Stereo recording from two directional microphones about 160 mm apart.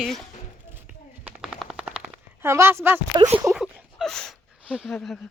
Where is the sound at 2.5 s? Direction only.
15° right (ahead or behind).